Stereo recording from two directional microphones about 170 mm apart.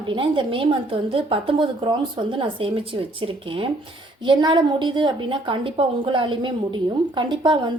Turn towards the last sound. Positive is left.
turn(degrees=-25)  # may be behind; listen again after turning